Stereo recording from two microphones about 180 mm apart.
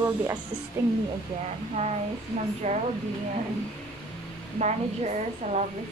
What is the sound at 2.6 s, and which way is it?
Speech, 40° right (ahead or behind).